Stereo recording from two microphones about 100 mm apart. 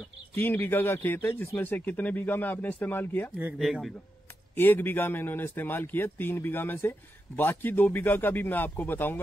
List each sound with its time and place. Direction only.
0.3 s a man's voice: 20° left (ahead or behind)
3.5 s a man's voice: centre (ahead or behind)
4.6 s a man's voice: 20° left (ahead or behind)